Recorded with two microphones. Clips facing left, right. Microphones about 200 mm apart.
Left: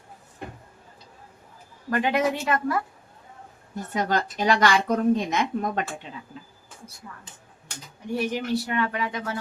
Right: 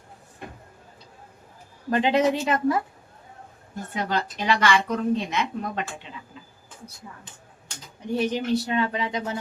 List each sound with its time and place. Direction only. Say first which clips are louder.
1.9 s speech: right 3 dB; 25° right (ahead or behind)
3.9 s a woman's voice: left 2 dB; 45° left (ahead or behind)
8.1 s speech: right 2 dB; 20° right (ahead or behind)